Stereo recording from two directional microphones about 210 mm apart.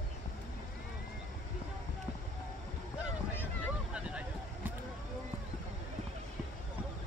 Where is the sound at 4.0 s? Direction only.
5° right (ahead or behind).